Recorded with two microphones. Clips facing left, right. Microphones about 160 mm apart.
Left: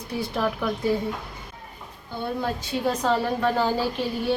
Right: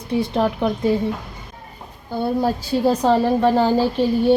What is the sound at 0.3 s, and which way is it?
Speech, 25° right (ahead or behind).